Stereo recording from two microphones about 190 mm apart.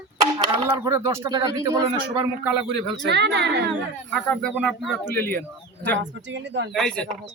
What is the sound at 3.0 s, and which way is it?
Speech, 65° right (ahead or behind).